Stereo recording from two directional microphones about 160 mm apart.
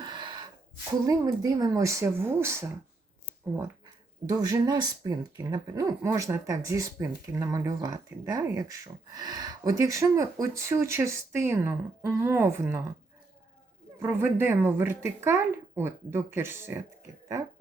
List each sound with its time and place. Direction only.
0.0 s gasp: 30° right (ahead or behind)
1.0 s speech: 20° right (ahead or behind)
4.3 s speech: 25° right (ahead or behind)
14.0 s speech: 15° right (ahead or behind)